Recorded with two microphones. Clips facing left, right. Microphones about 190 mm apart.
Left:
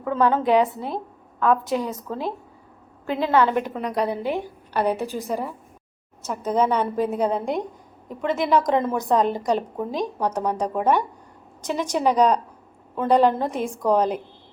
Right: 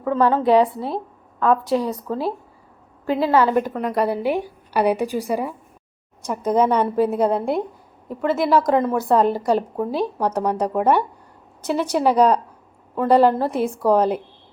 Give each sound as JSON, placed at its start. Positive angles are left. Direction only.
{"t": 0.0, "sound": "a woman's voice", "side_deg": 0}
{"t": 1.7, "sound": "speech", "side_deg": -40}
{"t": 3.1, "sound": "a woman's voice", "side_deg": -5}
{"t": 4.2, "sound": "a woman's voice", "side_deg": -10}